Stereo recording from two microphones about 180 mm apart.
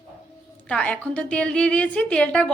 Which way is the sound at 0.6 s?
5° left (ahead or behind).